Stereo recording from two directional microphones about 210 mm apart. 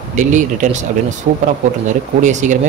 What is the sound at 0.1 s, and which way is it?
Speech, 35° right (ahead or behind).